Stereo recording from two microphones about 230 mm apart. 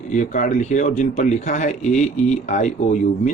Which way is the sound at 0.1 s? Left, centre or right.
Left.